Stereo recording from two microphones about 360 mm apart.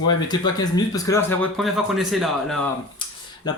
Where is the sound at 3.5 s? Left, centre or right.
Centre.